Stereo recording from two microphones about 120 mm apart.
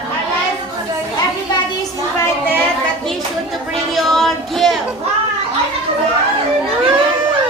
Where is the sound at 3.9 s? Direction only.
Centre (ahead or behind).